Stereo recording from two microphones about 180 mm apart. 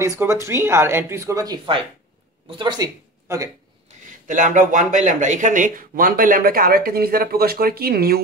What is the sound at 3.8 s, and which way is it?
Speech, 45° right (ahead or behind).